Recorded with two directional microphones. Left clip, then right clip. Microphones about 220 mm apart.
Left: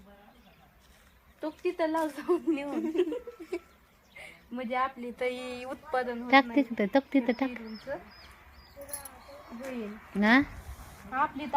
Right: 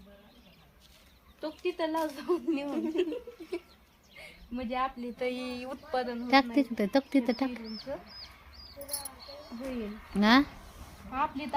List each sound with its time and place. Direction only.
1.4 s speech: 25° left (ahead or behind)
6.3 s speech: 5° right (ahead or behind)
7.9 s speech: 35° left (ahead or behind)
10.2 s speech: 5° right (ahead or behind)
11.1 s speech: 15° left (ahead or behind)